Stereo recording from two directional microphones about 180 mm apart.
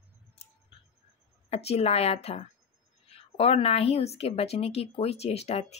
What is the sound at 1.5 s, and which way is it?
Speech, 35° left (ahead or behind).